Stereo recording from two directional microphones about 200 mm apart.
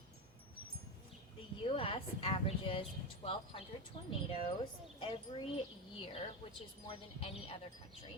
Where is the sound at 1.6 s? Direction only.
30° left (ahead or behind).